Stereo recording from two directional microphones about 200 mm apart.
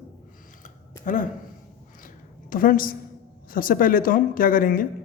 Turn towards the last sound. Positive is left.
turn(degrees=45)  # may be behind; listen again after turning